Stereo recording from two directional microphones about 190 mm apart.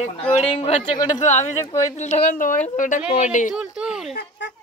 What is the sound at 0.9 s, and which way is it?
Speech, 20° left (ahead or behind).